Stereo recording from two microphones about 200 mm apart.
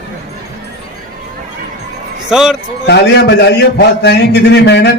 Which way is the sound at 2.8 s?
55° left (ahead or behind).